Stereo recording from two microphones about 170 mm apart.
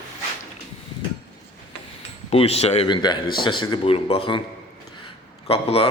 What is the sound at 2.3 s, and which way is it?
A man's voice, 35° left (ahead or behind).